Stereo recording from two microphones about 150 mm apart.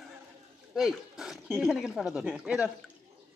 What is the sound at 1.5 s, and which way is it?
Speech, 5° right (ahead or behind).